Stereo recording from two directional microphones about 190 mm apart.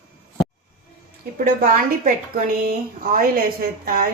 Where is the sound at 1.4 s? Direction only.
45° right (ahead or behind).